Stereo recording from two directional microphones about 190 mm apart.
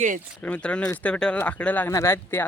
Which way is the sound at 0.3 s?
5° left (ahead or behind).